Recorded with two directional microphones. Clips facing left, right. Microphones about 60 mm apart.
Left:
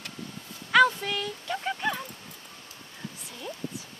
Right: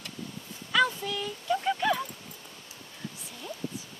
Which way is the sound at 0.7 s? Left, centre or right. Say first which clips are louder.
Left 5 dB; left.